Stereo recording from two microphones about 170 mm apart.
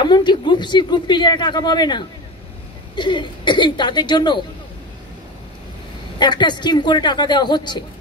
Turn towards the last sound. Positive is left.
turn(degrees=25)  # may be behind; listen again after turning